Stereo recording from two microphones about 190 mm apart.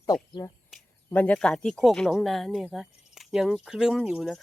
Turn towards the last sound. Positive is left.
turn(degrees=-5)  # may be behind; listen again after turning